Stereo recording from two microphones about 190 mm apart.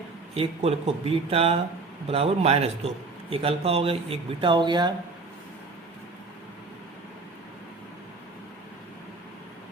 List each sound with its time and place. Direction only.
0.3 s a man's voice: 30° right (ahead or behind)